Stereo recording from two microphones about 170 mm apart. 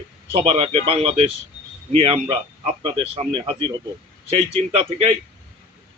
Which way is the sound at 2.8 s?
30° right (ahead or behind).